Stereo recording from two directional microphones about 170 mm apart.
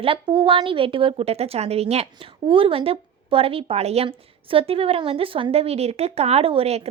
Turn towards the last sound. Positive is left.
turn(degrees=-35)  # may be behind; listen again after turning